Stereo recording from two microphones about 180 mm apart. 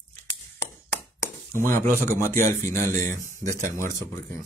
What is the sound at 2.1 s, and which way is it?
Speech, 15° left (ahead or behind).